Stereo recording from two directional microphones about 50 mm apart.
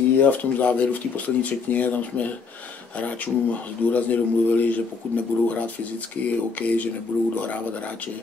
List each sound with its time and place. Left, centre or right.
0.2 s a man's voice: left